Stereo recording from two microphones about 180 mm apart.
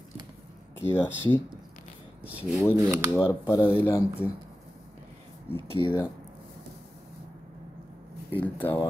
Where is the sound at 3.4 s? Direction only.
10° left (ahead or behind).